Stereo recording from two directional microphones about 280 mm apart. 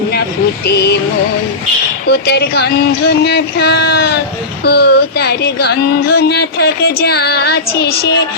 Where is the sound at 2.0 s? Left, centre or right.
Left.